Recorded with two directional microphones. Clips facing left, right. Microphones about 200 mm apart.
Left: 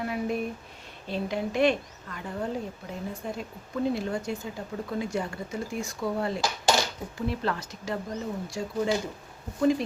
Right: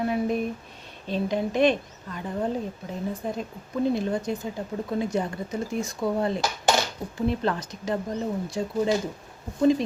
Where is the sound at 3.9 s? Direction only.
20° right (ahead or behind).